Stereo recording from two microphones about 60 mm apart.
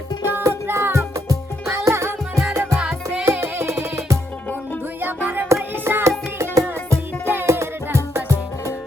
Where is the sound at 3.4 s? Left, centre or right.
Right.